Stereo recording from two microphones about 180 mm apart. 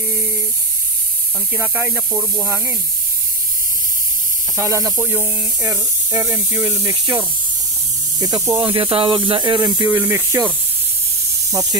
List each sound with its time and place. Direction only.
1.5 s speech: 10° right (ahead or behind)
4.6 s speech: 15° right (ahead or behind)
8.2 s hiss: 20° right (ahead or behind)
9.9 s speech: 15° right (ahead or behind)